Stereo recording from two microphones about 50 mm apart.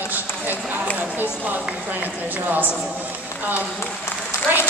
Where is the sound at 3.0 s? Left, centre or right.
Right.